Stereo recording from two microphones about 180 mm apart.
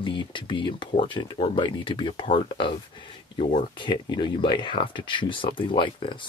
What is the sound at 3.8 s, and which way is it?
Speech, 25° left (ahead or behind).